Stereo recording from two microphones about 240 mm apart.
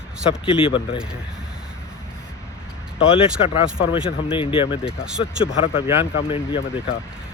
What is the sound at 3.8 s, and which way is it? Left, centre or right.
Speech, left.